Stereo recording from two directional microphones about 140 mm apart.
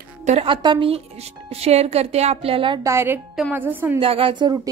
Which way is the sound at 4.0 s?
40° right (ahead or behind).